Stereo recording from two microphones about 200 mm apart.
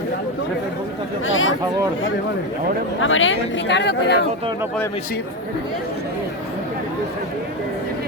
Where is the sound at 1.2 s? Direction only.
75° left (ahead or behind).